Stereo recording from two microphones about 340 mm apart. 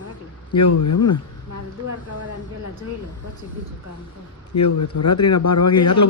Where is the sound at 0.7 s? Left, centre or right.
Left.